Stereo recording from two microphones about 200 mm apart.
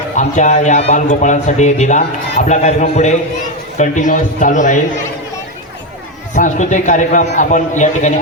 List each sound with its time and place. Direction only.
0.2 s a man's voice: 35° left (ahead or behind)
6.3 s a man's voice: 40° left (ahead or behind)